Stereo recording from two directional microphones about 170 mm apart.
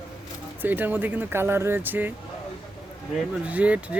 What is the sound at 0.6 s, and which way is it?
Speech, 10° right (ahead or behind).